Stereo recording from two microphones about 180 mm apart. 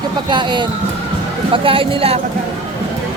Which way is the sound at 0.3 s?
25° right (ahead or behind).